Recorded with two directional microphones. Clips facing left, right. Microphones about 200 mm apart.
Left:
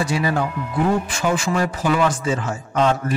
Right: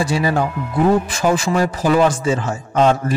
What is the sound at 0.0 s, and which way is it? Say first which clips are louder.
Speech: right 3 dB; 30° right (ahead or behind).